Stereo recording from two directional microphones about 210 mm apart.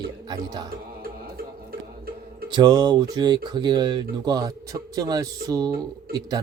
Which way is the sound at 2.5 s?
20° right (ahead or behind).